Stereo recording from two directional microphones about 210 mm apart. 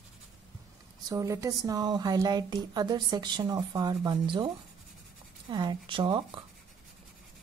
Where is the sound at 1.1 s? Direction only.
15° right (ahead or behind).